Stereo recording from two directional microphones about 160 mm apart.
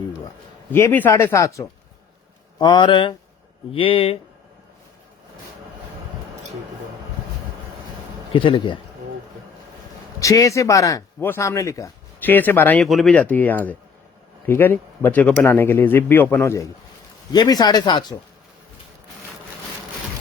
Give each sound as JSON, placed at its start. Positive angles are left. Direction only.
{"t": 0.7, "sound": "speech", "side_deg": 10}
{"t": 8.3, "sound": "speech", "side_deg": 30}
{"t": 10.2, "sound": "speech", "side_deg": 20}